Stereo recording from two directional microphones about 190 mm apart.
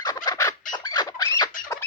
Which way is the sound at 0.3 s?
15° left (ahead or behind).